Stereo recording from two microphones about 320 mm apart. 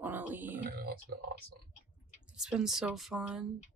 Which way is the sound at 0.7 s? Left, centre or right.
Right.